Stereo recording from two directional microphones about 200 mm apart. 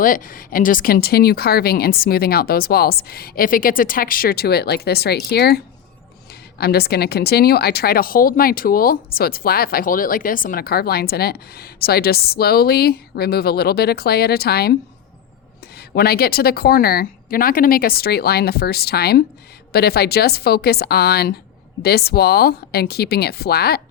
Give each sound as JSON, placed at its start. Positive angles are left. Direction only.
{"t": 0.0, "sound": "speech", "side_deg": 45}
{"t": 16.0, "sound": "speech", "side_deg": 50}